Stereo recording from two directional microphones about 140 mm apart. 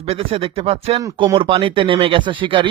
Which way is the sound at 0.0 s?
45° right (ahead or behind).